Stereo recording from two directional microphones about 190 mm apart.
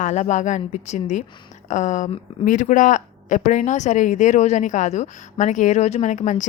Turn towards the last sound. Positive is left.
turn(degrees=40)  # may be behind; listen again after turning